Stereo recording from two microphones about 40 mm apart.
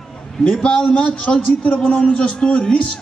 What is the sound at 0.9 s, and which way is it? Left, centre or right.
Speech, left.